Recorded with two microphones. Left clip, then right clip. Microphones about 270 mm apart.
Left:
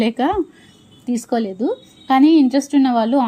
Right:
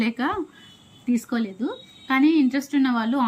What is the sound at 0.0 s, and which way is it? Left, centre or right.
A woman's voice, centre.